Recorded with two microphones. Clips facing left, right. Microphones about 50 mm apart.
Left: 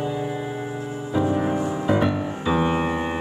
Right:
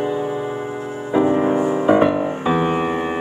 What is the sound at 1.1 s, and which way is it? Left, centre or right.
Music, right.